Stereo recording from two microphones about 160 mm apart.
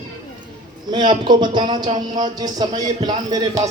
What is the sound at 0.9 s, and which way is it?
Speech, 30° right (ahead or behind).